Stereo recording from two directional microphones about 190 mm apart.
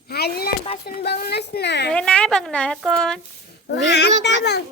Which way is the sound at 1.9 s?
5° left (ahead or behind).